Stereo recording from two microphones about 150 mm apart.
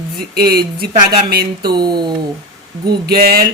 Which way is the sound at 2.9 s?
90° right.